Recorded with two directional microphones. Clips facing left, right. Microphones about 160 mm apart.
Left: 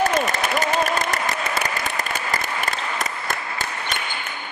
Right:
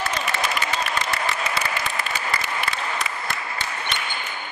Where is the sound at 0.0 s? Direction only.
45° left (ahead or behind).